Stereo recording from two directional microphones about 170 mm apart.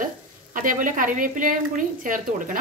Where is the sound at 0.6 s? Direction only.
50° right (ahead or behind).